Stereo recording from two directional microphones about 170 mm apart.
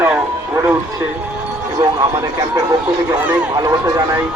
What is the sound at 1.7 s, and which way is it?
A man's voice, 20° right (ahead or behind).